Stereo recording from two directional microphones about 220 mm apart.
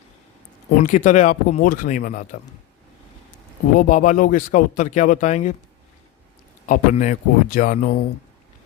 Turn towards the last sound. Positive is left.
turn(degrees=40)  # may be behind; listen again after turning